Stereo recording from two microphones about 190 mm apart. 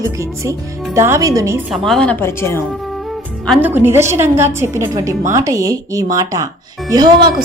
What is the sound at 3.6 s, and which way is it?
Speech, 10° right (ahead or behind).